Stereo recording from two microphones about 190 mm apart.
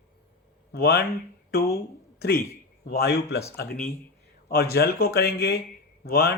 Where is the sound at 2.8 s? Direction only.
55° left (ahead or behind).